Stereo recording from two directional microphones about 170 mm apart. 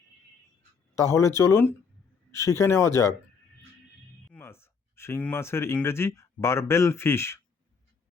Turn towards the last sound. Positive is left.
turn(degrees=15)  # may be behind; listen again after turning